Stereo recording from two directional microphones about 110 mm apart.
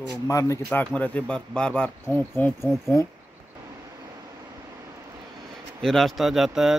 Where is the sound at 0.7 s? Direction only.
15° left (ahead or behind).